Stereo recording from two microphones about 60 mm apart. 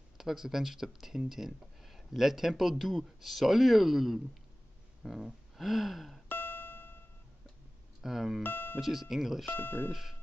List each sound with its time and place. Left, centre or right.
0.2 s speech: centre
6.2 s music: left
8.0 s speech: centre
8.4 s speech: left
8.7 s speech: centre
9.5 s speech: left